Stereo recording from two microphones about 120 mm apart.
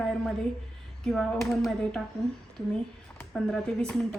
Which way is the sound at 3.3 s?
5° left (ahead or behind).